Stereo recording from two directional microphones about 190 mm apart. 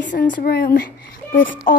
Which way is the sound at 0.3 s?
50° left (ahead or behind).